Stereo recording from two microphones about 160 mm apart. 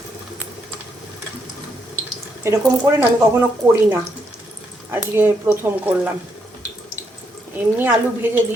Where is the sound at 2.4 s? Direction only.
15° right (ahead or behind).